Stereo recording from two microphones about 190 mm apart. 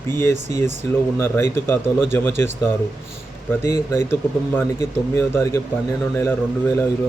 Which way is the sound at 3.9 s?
15° left (ahead or behind).